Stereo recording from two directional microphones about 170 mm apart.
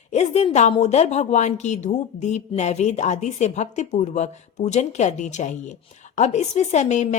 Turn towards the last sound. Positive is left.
turn(degrees=45)  # may be behind; listen again after turning